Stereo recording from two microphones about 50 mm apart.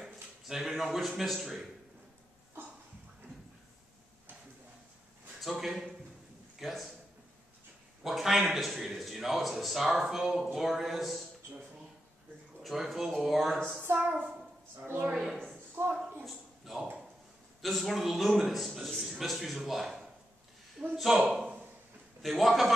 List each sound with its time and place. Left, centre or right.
0.0 s speech: centre
5.4 s a man's voice: centre
8.0 s a man's voice: centre
12.6 s a man's voice: centre
13.9 s a child's voice: right
15.8 s a woman's voice: right
16.3 s a sound: centre
17.6 s a man's voice: centre